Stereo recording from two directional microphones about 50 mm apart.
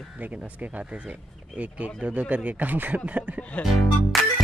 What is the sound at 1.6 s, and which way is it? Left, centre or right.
Speech, right.